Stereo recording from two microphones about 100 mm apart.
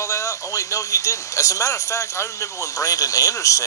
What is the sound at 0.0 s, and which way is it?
A man's voice, 30° left (ahead or behind).